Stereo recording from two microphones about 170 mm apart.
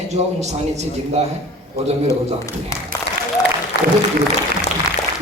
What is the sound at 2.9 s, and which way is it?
Applause, 20° left (ahead or behind).